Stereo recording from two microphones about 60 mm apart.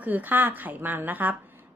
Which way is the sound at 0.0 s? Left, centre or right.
Right.